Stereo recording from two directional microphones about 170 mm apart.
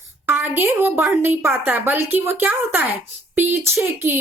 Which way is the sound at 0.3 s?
10° right (ahead or behind).